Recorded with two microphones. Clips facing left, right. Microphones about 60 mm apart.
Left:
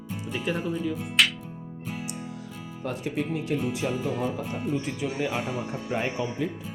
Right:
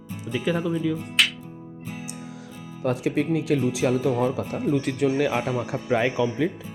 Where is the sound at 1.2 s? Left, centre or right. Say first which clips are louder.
Even; centre.